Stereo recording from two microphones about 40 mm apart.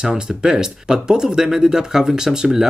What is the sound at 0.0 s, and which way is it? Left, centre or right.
Speech, centre.